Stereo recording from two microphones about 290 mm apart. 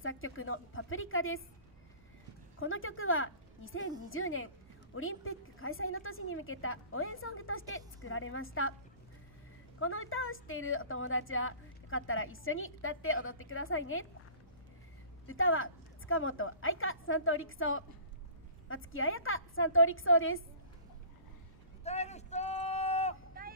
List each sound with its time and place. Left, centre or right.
0.0 s a woman's voice: left
2.6 s a woman's voice: left
9.8 s a woman's voice: left
15.2 s a woman's voice: left
21.8 s a sound: left
23.4 s vehicle: right